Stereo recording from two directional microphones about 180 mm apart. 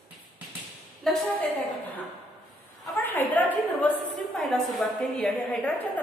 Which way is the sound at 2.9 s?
10° left (ahead or behind).